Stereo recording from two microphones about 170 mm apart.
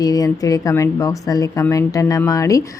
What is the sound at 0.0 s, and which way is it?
Speech, 20° left (ahead or behind).